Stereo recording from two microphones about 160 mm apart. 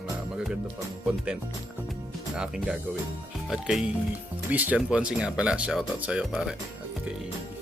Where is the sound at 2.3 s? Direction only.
5° right (ahead or behind).